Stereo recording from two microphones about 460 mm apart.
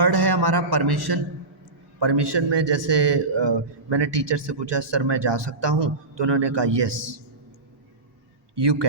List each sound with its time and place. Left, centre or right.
0.0 s a man's voice: right
8.5 s a man's voice: right